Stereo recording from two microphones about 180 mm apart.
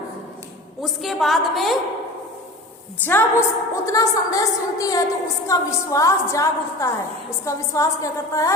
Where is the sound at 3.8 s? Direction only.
20° left (ahead or behind).